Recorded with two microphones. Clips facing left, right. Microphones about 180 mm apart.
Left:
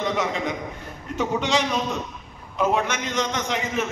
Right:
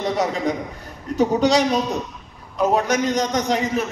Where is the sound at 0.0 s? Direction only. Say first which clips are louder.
Right 3 dB; 35° right (ahead or behind).